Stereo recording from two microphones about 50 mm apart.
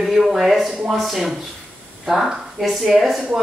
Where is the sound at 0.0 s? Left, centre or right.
Centre.